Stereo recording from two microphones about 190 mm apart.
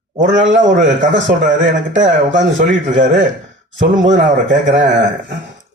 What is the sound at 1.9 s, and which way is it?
Speech, 80° right.